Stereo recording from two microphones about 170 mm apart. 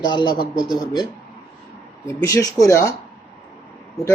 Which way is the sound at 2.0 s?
20° left (ahead or behind).